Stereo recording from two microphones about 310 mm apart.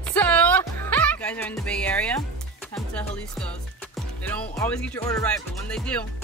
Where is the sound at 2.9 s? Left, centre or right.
Centre.